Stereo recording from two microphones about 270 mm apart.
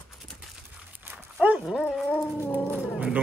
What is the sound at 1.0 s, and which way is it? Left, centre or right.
Dog, centre.